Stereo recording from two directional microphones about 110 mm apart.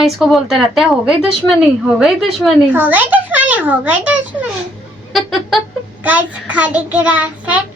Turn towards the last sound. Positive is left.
turn(degrees=-15)  # may be behind; listen again after turning